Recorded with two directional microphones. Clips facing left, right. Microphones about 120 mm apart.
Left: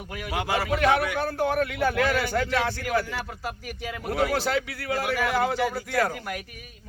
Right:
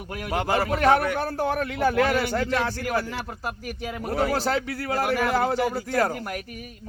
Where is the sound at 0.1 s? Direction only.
50° right (ahead or behind).